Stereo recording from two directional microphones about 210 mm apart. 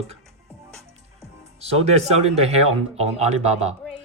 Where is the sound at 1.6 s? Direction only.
30° right (ahead or behind).